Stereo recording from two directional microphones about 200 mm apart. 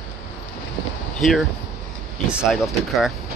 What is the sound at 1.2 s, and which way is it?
Speech, centre (ahead or behind).